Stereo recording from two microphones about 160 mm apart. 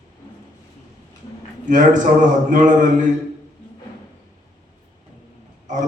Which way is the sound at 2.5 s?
50° right (ahead or behind).